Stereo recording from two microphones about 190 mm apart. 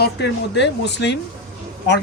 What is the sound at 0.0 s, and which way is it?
Speech, 60° left (ahead or behind).